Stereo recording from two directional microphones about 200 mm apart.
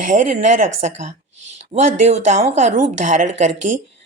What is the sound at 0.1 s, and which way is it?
A woman's voice, 40° right (ahead or behind).